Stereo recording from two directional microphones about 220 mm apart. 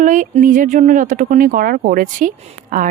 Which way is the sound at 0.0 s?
35° right (ahead or behind).